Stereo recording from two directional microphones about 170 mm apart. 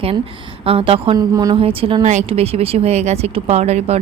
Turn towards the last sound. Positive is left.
turn(degrees=-40)  # may be behind; listen again after turning